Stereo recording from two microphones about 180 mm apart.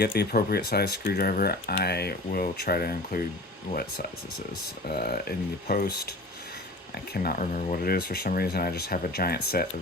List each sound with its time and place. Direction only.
0.0 s speech: 60° left (ahead or behind)